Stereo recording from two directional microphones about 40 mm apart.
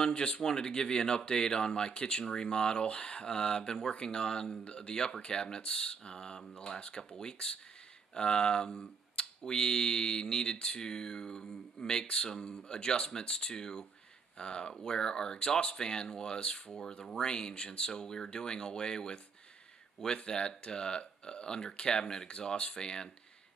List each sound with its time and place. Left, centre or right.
0.0 s speech: left
20.2 s speech: left